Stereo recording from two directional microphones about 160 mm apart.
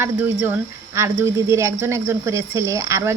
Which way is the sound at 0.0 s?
10° right (ahead or behind).